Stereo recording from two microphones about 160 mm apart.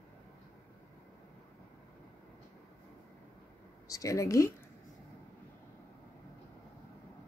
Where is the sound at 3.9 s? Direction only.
20° left (ahead or behind).